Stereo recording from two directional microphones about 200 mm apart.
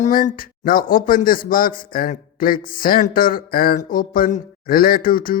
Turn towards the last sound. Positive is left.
turn(degrees=45)  # may be behind; listen again after turning